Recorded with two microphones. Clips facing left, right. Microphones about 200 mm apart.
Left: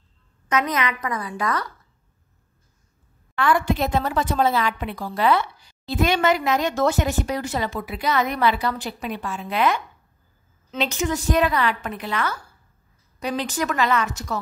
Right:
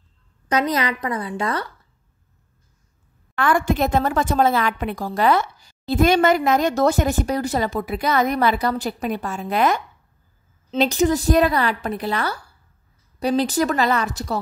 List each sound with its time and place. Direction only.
0.5 s a woman's voice: 35° right (ahead or behind)
3.3 s a woman's voice: 50° right (ahead or behind)